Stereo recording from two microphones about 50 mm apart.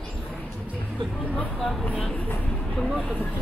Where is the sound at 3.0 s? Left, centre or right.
Left.